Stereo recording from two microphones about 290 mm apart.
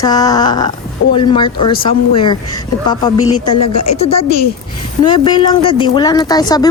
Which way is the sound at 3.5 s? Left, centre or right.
Left.